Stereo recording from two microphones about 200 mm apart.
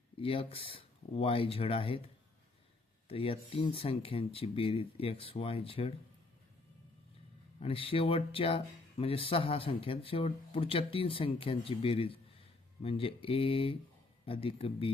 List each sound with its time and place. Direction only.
0.2 s speech: 25° left (ahead or behind)
3.1 s speech: 30° left (ahead or behind)
7.6 s speech: 30° left (ahead or behind)